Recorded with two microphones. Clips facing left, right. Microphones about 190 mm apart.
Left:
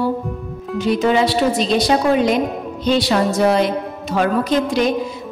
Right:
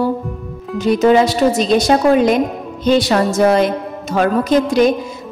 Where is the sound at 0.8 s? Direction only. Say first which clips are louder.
Right 4 dB; 45° right (ahead or behind).